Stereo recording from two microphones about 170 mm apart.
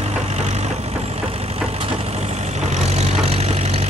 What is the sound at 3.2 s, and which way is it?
Vehicle, 40° right (ahead or behind).